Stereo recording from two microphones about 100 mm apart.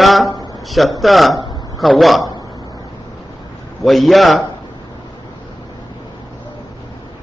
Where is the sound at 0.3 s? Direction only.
35° left (ahead or behind).